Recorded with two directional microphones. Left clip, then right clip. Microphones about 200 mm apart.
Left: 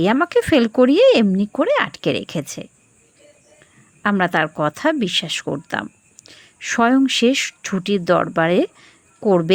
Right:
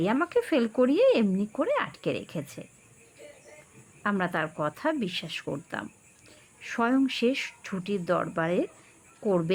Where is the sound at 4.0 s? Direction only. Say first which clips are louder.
Left 11 dB; 30° left (ahead or behind).